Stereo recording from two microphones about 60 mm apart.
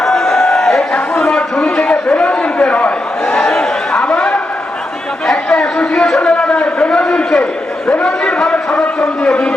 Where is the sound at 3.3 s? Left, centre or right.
Centre.